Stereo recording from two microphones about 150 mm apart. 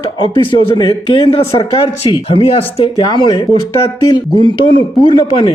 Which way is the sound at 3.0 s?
30° left (ahead or behind).